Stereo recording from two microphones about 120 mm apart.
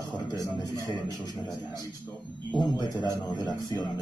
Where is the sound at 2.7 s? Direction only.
35° left (ahead or behind).